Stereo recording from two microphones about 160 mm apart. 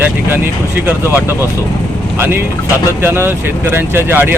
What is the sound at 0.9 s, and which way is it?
Speech, 10° right (ahead or behind).